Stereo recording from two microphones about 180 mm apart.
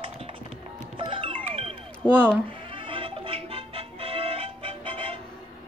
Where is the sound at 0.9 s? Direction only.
30° right (ahead or behind).